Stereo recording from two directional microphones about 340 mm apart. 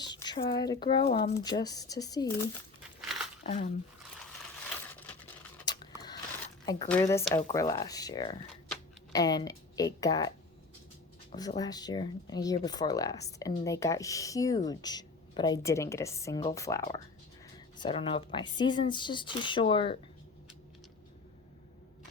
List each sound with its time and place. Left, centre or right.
0.0 s speech: centre
3.4 s speech: centre
5.6 s a sound: centre
6.7 s speech: centre